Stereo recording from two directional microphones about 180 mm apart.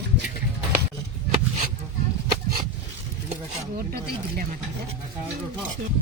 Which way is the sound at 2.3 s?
55° right (ahead or behind).